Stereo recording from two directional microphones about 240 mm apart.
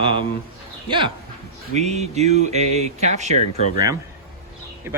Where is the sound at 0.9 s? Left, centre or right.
Centre.